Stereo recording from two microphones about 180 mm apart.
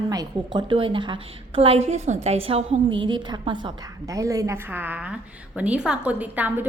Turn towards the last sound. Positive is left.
turn(degrees=-10)  # may be behind; listen again after turning